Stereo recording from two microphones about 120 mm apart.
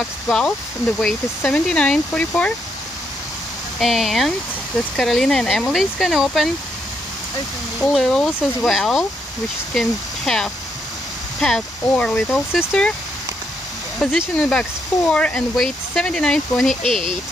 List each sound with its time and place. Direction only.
0.3 s speech: 5° left (ahead or behind)
3.8 s speech: centre (ahead or behind)
7.8 s speech: 5° left (ahead or behind)
14.3 s speech: 10° left (ahead or behind)